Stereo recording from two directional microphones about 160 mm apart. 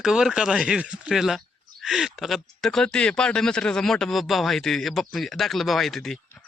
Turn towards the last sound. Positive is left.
turn(degrees=0)  # may be behind; listen again after turning